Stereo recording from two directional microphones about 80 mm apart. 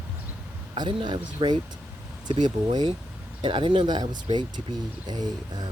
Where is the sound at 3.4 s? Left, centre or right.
Right.